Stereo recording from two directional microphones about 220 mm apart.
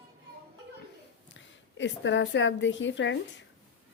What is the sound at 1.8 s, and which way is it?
Speech, 55° left (ahead or behind).